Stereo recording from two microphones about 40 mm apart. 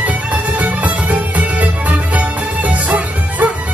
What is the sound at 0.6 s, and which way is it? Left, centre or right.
Music, right.